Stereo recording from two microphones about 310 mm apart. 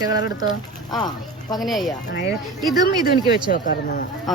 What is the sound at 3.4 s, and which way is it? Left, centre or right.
Speech, left.